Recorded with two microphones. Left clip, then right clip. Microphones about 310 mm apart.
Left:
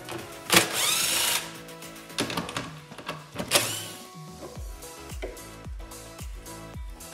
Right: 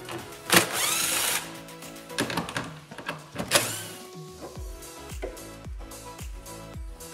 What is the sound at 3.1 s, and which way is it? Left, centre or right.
Printer, centre.